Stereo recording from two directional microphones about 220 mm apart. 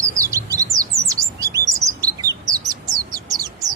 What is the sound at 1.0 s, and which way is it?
Bird, 15° right (ahead or behind).